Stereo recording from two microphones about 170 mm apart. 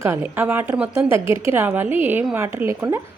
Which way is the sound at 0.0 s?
15° right (ahead or behind).